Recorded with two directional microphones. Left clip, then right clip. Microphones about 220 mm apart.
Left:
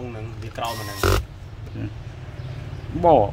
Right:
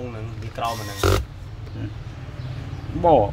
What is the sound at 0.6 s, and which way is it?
Speech, 20° left (ahead or behind).